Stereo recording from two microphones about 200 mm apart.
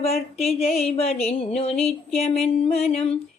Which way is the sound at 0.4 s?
35° left (ahead or behind).